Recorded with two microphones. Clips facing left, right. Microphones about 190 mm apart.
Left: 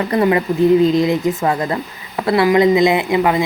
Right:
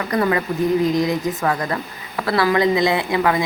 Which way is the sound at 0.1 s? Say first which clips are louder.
Left 3 dB; 25° left (ahead or behind).